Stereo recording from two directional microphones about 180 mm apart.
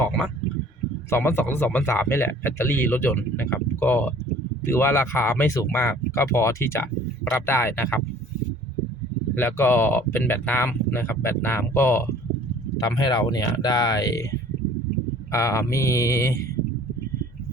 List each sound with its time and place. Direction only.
0.0 s a sound: 5° left (ahead or behind)
1.1 s speech: 10° left (ahead or behind)
9.3 s speech: 10° left (ahead or behind)